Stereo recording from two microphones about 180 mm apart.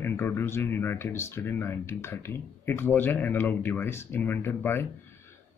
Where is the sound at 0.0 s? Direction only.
10° left (ahead or behind).